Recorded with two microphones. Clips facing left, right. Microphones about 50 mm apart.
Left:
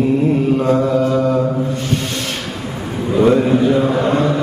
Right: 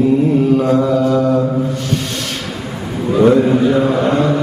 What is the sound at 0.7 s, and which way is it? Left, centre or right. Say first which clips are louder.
Mantra: right 2 dB; left.